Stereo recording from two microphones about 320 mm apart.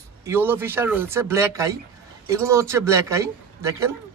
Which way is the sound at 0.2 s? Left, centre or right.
Centre.